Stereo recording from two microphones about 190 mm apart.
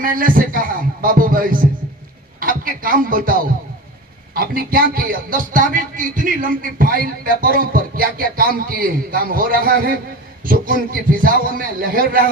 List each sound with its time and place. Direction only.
0.0 s a man's voice: 45° right (ahead or behind)